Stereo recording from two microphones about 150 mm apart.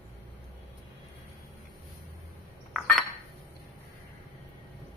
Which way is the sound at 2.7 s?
5° right (ahead or behind).